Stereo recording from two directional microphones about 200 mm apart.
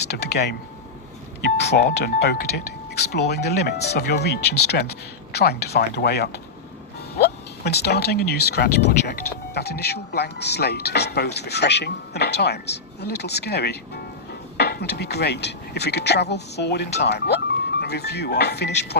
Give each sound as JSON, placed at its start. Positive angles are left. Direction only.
{"t": 0.1, "sound": "speech", "side_deg": 55}